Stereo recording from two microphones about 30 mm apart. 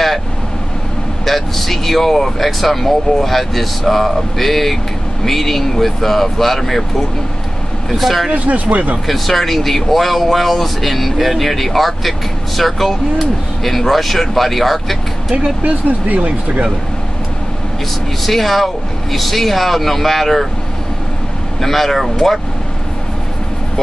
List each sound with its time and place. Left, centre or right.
1.2 s speech: centre
7.9 s speech: centre
8.3 s speech: right
9.0 s speech: centre
16.1 s speech: right
18.2 s speech: centre
21.5 s speech: centre